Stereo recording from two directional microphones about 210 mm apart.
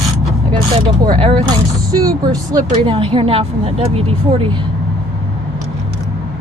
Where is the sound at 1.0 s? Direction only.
25° right (ahead or behind).